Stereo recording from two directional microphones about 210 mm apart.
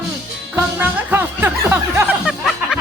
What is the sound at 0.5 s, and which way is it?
Music, 10° right (ahead or behind).